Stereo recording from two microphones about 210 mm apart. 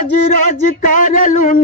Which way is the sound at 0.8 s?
40° left (ahead or behind).